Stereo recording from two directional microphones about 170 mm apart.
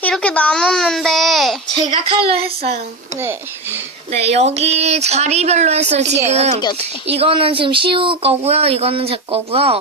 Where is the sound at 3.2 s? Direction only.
15° right (ahead or behind).